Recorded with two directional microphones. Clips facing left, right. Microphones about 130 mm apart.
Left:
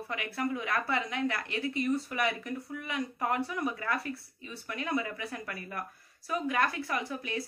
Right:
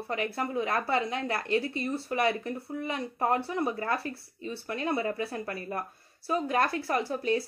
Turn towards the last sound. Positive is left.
turn(degrees=-35)  # may be behind; listen again after turning